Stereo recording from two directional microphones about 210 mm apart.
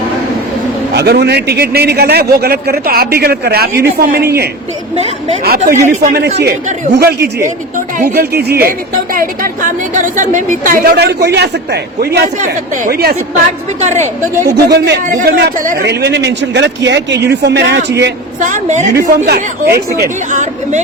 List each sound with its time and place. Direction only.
0.9 s a man's voice: 50° right (ahead or behind)
14.7 s a man's voice: 45° right (ahead or behind)
18.4 s speech: 35° right (ahead or behind)
18.9 s a man's voice: 50° right (ahead or behind)
20.0 s speech: 35° right (ahead or behind)